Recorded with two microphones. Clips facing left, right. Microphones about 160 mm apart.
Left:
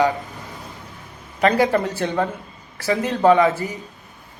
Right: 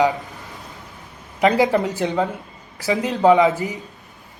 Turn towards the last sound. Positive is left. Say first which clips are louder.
# right 1 dB
turn(degrees=-15)  # may be behind; listen again after turning